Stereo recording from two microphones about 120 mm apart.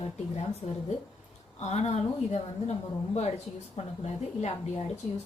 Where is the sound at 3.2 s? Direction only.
60° left (ahead or behind).